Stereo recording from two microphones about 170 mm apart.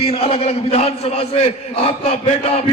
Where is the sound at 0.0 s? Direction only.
35° left (ahead or behind).